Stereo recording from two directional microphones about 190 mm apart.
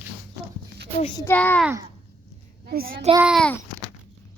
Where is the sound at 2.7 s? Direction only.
50° right (ahead or behind).